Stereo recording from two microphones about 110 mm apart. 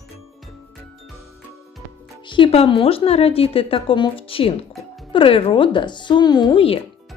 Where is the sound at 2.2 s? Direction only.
50° left (ahead or behind).